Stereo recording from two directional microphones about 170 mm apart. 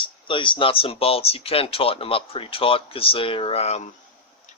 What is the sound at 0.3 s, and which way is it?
Speech, 30° left (ahead or behind).